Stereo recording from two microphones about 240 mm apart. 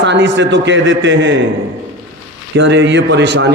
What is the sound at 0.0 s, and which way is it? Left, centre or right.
A man's voice, right.